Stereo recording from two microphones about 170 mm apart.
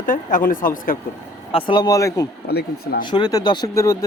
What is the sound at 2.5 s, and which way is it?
Speech, 70° left (ahead or behind).